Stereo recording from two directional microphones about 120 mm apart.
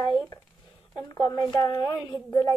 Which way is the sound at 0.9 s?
30° left (ahead or behind).